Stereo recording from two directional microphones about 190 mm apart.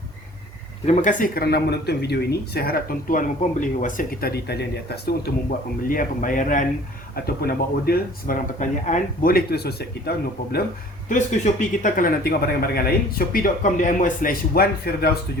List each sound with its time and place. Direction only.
0.9 s a man's voice: 45° left (ahead or behind)
7.3 s a man's voice: 55° left (ahead or behind)
11.1 s a man's voice: 40° left (ahead or behind)